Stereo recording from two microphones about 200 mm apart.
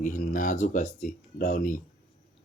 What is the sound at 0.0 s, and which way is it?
Speech, 40° left (ahead or behind).